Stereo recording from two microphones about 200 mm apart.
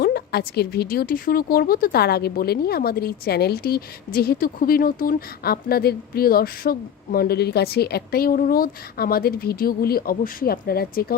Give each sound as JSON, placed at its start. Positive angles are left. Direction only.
{"t": 0.0, "sound": "speech", "side_deg": 55}